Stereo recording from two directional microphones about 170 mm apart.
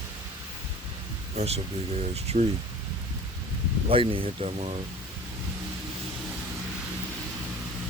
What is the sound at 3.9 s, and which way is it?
Speech, 30° right (ahead or behind).